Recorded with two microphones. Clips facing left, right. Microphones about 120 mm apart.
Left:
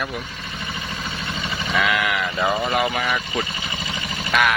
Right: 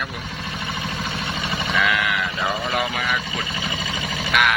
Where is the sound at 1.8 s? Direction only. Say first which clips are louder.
Left 1 dB; centre (ahead or behind).